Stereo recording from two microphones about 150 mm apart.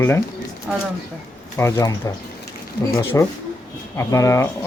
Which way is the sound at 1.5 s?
20° left (ahead or behind).